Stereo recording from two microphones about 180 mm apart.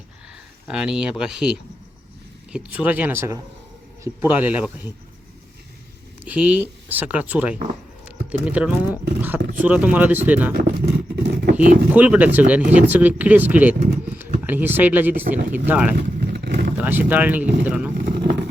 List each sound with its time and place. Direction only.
0.7 s speech: 5° right (ahead or behind)
6.2 s speech: 5° right (ahead or behind)
10.5 s a sound: 55° right (ahead or behind)
11.9 s speech: 10° right (ahead or behind)
16.3 s vehicle: 65° right (ahead or behind)
16.7 s speech: 10° right (ahead or behind)
17.9 s vehicle: 60° right (ahead or behind)